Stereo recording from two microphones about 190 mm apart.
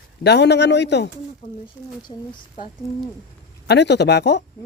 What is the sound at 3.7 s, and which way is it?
Speech, 65° left (ahead or behind).